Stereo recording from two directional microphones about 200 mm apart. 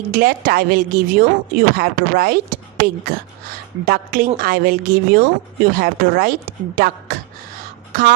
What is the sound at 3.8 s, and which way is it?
A woman's voice, 50° right (ahead or behind).